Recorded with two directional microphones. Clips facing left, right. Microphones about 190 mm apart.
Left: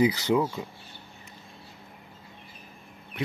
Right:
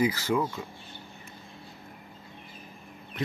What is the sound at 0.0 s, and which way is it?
Speech, 20° left (ahead or behind).